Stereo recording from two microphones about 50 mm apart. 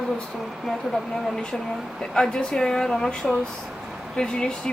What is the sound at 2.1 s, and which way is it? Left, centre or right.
Speech, centre.